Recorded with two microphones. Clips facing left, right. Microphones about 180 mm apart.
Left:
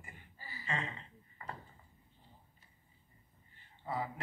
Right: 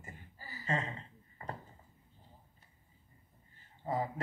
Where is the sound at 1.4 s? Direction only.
40° right (ahead or behind).